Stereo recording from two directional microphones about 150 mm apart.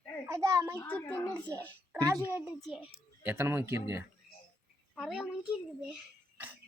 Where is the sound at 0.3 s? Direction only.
20° right (ahead or behind).